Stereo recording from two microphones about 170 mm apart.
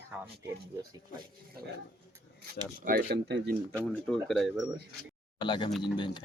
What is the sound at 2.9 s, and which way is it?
Speech, 65° right (ahead or behind).